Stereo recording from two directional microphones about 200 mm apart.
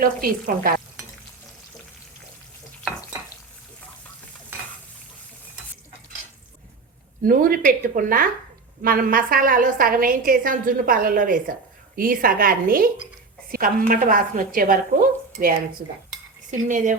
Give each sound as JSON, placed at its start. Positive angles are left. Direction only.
{"t": 0.0, "sound": "a woman's voice", "side_deg": -45}
{"t": 7.2, "sound": "a woman's voice", "side_deg": -45}
{"t": 16.5, "sound": "speech", "side_deg": -40}